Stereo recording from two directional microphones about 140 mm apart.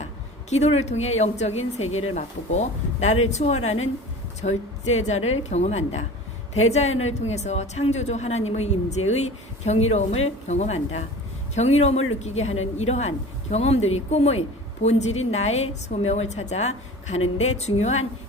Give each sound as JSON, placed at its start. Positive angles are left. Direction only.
{"t": 0.5, "sound": "speech", "side_deg": 55}